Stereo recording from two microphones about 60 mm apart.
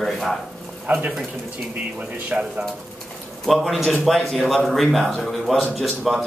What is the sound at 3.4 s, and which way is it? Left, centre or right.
Speech, centre.